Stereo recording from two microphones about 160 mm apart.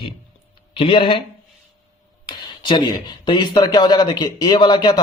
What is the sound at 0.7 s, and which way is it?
Speech, 35° left (ahead or behind).